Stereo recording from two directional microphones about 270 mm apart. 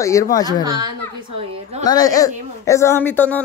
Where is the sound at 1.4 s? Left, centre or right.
Right.